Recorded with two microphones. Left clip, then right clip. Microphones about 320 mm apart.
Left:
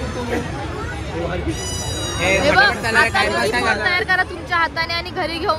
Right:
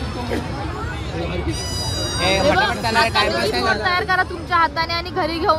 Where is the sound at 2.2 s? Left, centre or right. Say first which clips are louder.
Left 3 dB; right.